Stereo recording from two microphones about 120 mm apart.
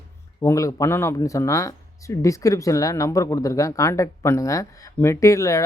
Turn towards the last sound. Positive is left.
turn(degrees=25)  # may be behind; listen again after turning